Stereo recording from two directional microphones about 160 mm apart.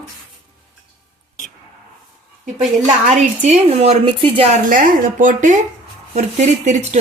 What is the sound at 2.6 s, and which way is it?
A woman's voice, 50° right (ahead or behind).